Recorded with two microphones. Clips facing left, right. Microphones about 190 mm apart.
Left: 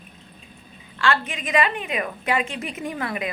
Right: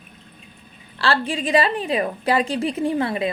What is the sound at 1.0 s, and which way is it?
A woman's voice, 35° right (ahead or behind).